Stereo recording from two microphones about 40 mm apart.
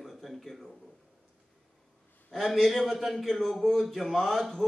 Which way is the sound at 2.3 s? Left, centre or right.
Centre.